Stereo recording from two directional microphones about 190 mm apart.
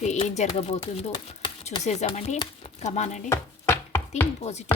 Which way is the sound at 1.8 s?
35° left (ahead or behind).